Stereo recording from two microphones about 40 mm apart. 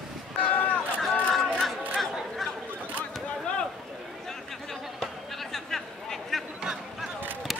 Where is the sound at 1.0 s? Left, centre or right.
Centre.